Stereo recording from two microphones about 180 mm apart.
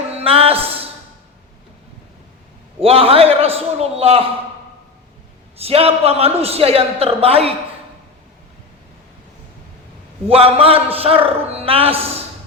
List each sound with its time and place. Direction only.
0.1 s a sound: 35° right (ahead or behind)
2.8 s a man's voice: 30° right (ahead or behind)
5.5 s a man's voice: 35° right (ahead or behind)
10.2 s a man's voice: 35° right (ahead or behind)